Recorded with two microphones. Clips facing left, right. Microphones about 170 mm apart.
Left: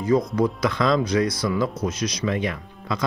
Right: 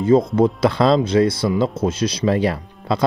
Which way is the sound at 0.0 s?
25° right (ahead or behind).